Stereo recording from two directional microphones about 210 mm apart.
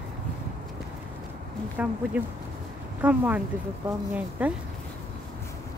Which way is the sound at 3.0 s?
5° right (ahead or behind).